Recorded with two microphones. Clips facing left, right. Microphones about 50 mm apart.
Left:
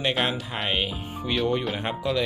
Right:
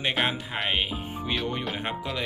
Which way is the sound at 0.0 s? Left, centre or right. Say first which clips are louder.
Left 1 dB; centre.